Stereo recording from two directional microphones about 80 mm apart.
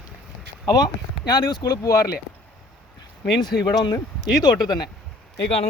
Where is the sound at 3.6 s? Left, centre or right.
Left.